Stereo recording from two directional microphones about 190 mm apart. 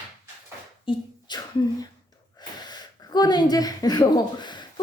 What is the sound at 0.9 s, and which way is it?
Speech, 25° left (ahead or behind).